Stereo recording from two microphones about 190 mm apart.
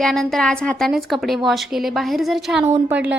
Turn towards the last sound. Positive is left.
turn(degrees=-10)  # may be behind; listen again after turning